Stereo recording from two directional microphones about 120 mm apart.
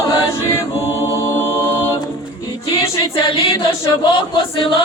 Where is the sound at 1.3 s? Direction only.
20° left (ahead or behind).